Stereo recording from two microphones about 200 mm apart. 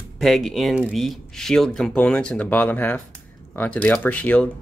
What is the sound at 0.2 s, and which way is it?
Speech, centre (ahead or behind).